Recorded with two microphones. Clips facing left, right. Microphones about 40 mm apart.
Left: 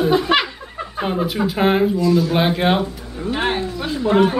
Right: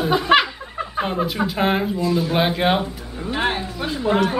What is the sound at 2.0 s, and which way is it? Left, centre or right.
Speech, centre.